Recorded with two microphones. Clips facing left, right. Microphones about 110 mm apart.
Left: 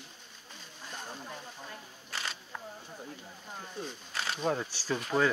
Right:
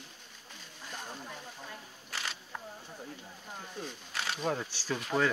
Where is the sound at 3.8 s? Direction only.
35° left (ahead or behind).